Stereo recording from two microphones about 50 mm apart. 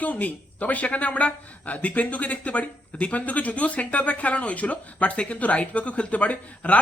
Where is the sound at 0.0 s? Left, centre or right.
Left.